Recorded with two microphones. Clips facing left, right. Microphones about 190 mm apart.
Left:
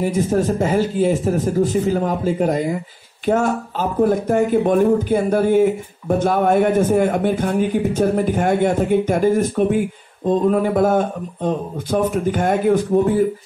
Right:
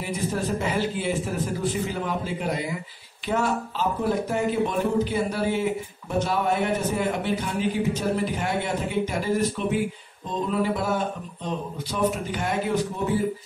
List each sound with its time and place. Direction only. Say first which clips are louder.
0.0 s speech: left 10 dB; 45° left (ahead or behind)